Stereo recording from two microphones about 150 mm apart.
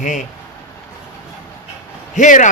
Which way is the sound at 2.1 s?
55° left (ahead or behind).